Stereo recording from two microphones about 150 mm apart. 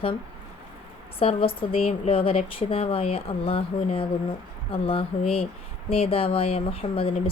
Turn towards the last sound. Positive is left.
turn(degrees=40)  # may be behind; listen again after turning